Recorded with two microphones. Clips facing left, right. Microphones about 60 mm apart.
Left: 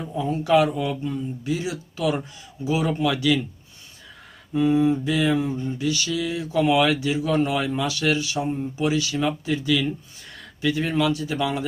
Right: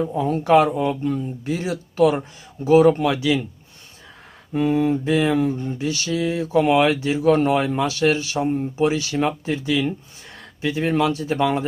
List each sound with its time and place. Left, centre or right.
0.0 s speech: right
3.2 s speech: right
4.5 s speech: right